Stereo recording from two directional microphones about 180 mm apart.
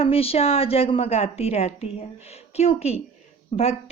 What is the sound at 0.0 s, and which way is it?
Music, 30° left (ahead or behind).